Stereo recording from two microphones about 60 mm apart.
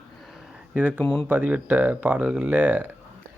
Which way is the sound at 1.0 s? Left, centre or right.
Centre.